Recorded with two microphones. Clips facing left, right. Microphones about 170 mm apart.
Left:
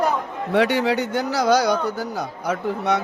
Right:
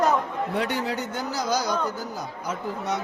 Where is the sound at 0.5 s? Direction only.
80° left.